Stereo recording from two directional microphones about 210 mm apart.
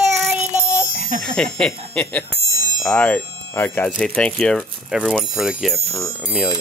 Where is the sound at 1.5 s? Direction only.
5° left (ahead or behind).